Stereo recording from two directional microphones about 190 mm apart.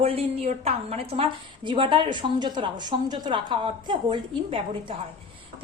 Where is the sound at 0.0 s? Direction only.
30° right (ahead or behind).